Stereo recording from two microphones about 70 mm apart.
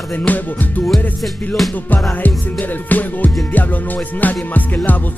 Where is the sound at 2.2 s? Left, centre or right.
Left.